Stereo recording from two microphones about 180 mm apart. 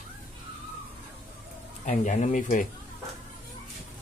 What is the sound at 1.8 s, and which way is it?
Speech, 40° left (ahead or behind).